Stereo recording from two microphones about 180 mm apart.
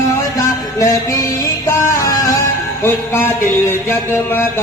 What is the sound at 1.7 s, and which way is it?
Music, 15° left (ahead or behind).